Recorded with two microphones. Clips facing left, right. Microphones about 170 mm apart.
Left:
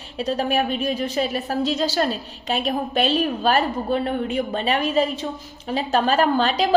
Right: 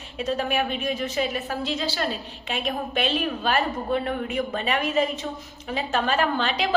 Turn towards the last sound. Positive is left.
turn(degrees=40)  # may be behind; listen again after turning